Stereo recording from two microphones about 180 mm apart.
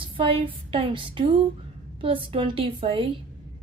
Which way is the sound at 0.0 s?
30° right (ahead or behind).